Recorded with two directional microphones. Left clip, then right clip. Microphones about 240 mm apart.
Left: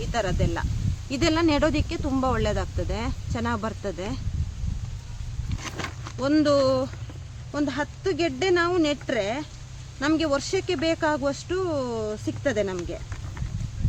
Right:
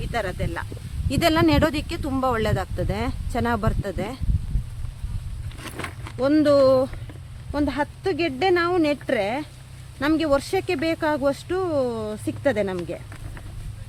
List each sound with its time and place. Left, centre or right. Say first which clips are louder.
0.1 s speech: even; right
5.6 s a sound: even; centre
6.1 s speech: right 4 dB; right